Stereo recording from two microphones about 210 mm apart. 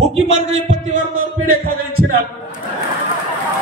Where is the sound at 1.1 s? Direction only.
75° right (ahead or behind).